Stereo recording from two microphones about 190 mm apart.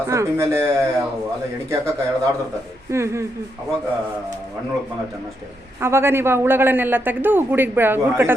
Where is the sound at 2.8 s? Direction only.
15° right (ahead or behind).